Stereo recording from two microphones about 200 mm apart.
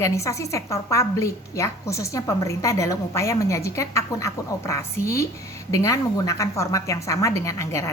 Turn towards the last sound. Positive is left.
turn(degrees=15)  # may be behind; listen again after turning